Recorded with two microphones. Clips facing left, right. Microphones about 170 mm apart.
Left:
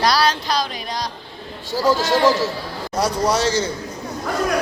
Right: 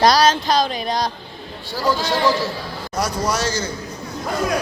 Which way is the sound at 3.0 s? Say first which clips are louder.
Left 3 dB; 30° left (ahead or behind).